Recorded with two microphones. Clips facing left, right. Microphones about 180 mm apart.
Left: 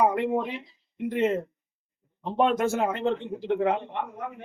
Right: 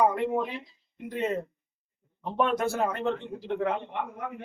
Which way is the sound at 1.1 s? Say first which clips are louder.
Left 4 dB; 20° left (ahead or behind).